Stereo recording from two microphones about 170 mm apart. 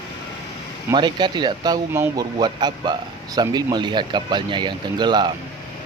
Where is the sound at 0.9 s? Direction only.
25° right (ahead or behind).